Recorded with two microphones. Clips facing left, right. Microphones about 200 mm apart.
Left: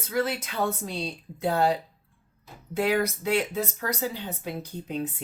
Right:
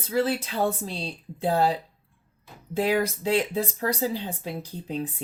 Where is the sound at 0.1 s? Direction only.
30° right (ahead or behind).